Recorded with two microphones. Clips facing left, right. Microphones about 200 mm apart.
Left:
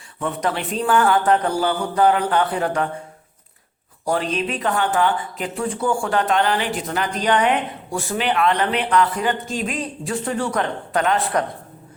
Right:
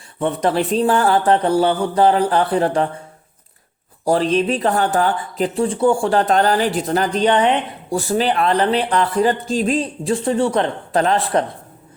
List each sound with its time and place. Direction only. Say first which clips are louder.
0.2 s speech: right 6 dB; 30° right (ahead or behind)
4.0 s speech: right 6 dB; 35° right (ahead or behind)